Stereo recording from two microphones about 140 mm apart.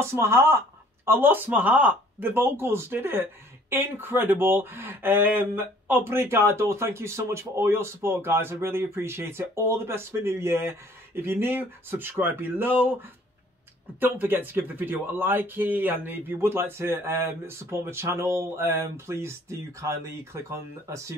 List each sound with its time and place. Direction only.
0.1 s speech: 20° right (ahead or behind)
13.9 s speech: 15° right (ahead or behind)